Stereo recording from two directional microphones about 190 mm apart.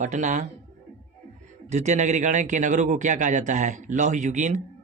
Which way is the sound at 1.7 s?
40° right (ahead or behind).